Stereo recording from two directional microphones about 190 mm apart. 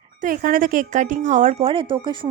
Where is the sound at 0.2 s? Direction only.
45° right (ahead or behind).